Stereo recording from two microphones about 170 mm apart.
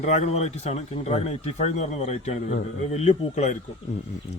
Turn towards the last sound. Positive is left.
turn(degrees=40)  # may be behind; listen again after turning